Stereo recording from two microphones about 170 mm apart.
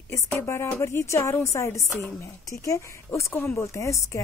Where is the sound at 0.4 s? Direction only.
15° left (ahead or behind).